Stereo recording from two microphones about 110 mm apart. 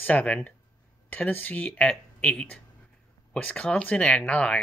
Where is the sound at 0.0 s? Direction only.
15° left (ahead or behind).